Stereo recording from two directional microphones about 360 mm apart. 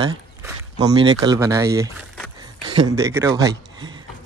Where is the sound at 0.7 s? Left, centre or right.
Centre.